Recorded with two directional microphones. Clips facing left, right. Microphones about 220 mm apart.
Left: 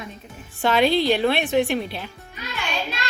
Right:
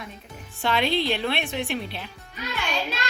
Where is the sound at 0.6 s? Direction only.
5° left (ahead or behind).